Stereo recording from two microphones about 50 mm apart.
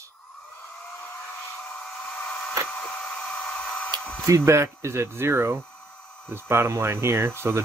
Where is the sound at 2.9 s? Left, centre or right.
Left.